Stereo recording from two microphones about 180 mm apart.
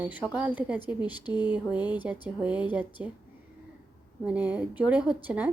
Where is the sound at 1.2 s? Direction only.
25° left (ahead or behind).